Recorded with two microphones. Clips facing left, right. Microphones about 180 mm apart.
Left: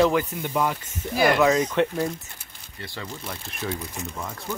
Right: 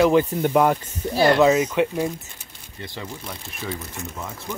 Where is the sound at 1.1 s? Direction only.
30° right (ahead or behind).